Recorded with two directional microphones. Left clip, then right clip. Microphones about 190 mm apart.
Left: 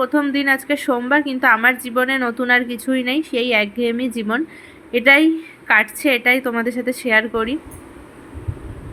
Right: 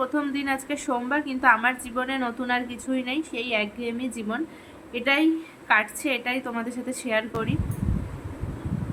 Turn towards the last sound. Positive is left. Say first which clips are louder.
# left 10 dB
turn(degrees=25)  # may be behind; listen again after turning